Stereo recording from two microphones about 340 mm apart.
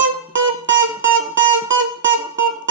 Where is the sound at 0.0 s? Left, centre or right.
Right.